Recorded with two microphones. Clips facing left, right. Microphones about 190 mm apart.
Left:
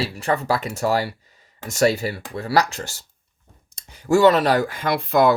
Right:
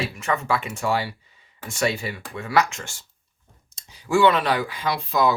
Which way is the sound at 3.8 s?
55° left (ahead or behind).